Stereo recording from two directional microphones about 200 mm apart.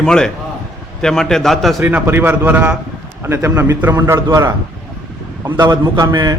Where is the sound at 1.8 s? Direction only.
10° right (ahead or behind).